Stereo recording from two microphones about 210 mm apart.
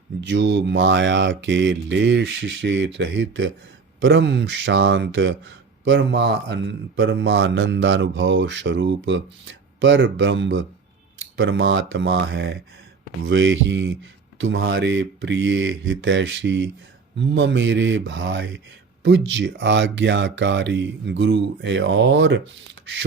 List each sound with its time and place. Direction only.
0.2 s speech: 60° right (ahead or behind)
11.2 s a sound: 70° right (ahead or behind)
11.6 s speech: 70° right (ahead or behind)
12.3 s speech: 50° right (ahead or behind)
13.2 s speech: 65° right (ahead or behind)